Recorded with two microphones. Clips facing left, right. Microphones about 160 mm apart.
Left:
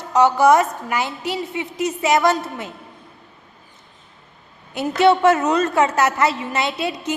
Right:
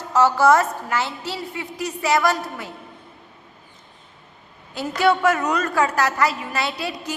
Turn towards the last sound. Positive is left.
turn(degrees=20)  # may be behind; listen again after turning